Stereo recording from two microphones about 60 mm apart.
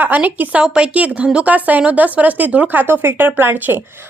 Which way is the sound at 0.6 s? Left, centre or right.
Centre.